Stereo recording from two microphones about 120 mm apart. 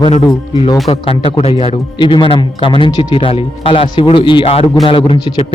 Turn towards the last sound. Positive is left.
turn(degrees=45)  # may be behind; listen again after turning